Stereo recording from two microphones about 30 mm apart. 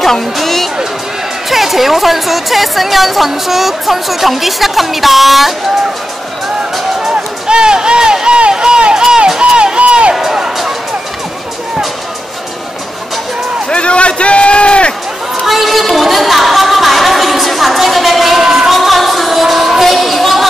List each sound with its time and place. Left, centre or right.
0.0 s speech: centre
1.5 s a woman's voice: centre
7.4 s a sound: right
8.4 s run: right
13.7 s a sound: left
15.4 s a sound: centre
16.0 s music: centre
18.4 s music: centre
18.7 s music: centre